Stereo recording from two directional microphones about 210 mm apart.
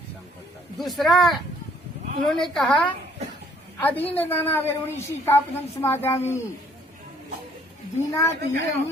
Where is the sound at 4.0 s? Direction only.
30° left (ahead or behind).